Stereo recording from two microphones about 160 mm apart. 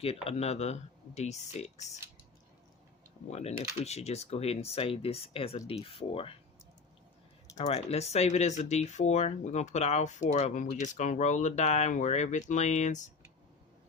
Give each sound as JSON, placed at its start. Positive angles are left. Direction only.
{"t": 0.0, "sound": "speech", "side_deg": 40}
{"t": 3.2, "sound": "speech", "side_deg": 40}
{"t": 7.5, "sound": "speech", "side_deg": 45}